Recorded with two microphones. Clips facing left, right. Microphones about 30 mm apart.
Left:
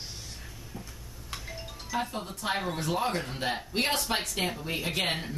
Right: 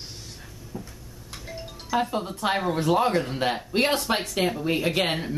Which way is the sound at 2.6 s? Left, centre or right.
Centre.